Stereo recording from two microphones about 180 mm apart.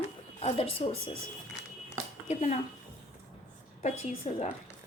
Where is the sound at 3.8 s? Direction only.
40° left (ahead or behind).